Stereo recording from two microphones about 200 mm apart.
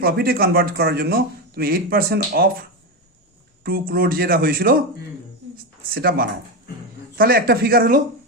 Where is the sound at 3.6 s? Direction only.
45° right (ahead or behind).